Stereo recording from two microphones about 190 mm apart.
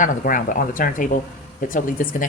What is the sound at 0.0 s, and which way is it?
Speech, 45° left (ahead or behind).